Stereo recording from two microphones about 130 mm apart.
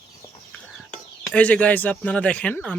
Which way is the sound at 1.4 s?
10° left (ahead or behind).